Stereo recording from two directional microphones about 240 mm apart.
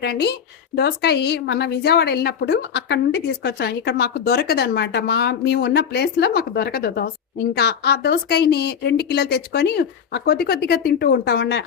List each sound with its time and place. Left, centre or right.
0.0 s speech: left